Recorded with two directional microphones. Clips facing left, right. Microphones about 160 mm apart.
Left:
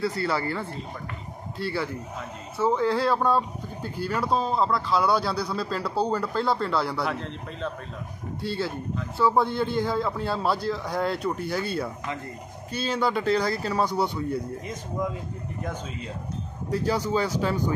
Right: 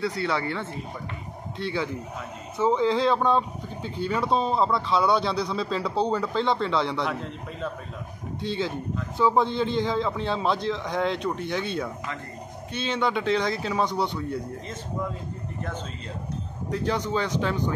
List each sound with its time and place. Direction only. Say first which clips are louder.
0.0 s speech: even; centre (ahead or behind)
2.5 s speech: right 1 dB; 15° right (ahead or behind)
3.1 s speech: right 1 dB; 5° left (ahead or behind)
8.4 s speech: right 1 dB; 5° left (ahead or behind)
9.2 s speech: even; 15° right (ahead or behind)
9.6 s speech: right 1 dB; 10° left (ahead or behind)
16.7 s speech: left 2 dB; 5° left (ahead or behind)